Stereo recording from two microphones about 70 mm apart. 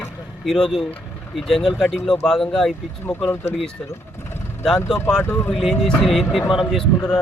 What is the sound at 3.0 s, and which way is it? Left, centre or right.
Speech, left.